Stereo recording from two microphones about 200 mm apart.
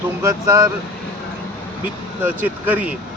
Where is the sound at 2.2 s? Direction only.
10° right (ahead or behind).